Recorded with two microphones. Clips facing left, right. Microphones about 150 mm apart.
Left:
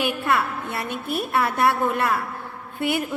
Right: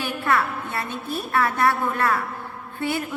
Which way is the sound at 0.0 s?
20° left (ahead or behind).